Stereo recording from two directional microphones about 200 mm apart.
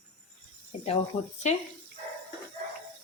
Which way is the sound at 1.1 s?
30° left (ahead or behind).